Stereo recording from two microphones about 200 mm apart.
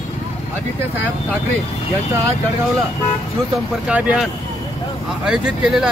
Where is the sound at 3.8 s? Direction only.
5° right (ahead or behind).